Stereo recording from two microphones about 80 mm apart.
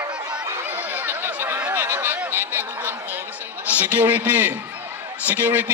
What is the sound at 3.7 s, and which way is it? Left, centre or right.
A man's voice, centre.